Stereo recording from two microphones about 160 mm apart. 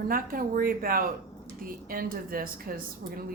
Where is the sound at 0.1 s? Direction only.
65° right (ahead or behind).